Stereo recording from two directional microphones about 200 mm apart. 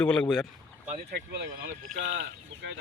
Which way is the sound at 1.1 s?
55° right (ahead or behind).